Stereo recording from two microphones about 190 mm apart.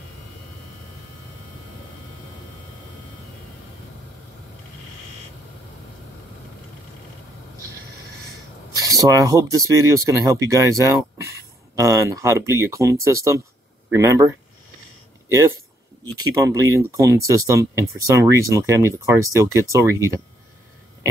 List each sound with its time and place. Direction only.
8.7 s speech: 20° right (ahead or behind)
16.3 s speech: 15° right (ahead or behind)